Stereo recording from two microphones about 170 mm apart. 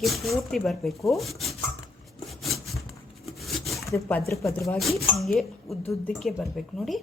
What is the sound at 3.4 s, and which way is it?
Rub, centre (ahead or behind).